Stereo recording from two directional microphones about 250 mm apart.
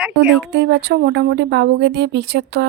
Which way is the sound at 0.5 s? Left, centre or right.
Right.